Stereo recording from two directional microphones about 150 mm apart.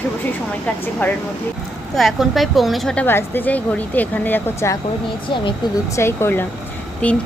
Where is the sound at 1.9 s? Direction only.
Centre (ahead or behind).